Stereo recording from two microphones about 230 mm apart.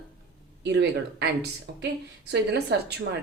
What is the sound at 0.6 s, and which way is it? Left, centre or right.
Speech, right.